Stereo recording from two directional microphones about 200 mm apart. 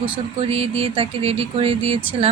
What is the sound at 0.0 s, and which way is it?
Speech, 30° right (ahead or behind).